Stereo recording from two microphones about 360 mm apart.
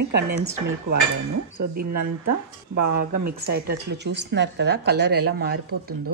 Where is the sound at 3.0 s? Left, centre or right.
Right.